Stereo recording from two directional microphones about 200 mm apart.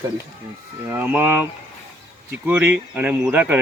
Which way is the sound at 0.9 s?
10° right (ahead or behind).